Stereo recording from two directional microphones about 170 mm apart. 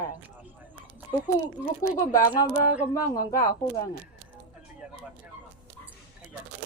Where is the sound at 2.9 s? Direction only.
20° left (ahead or behind).